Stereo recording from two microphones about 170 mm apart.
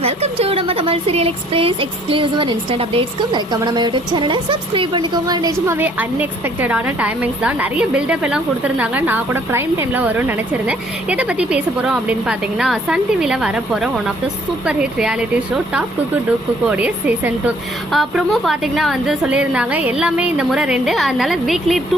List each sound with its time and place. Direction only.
0.0 s speech: 35° right (ahead or behind)
5.8 s a woman's voice: 10° right (ahead or behind)
16.6 s a woman's voice: 10° right (ahead or behind)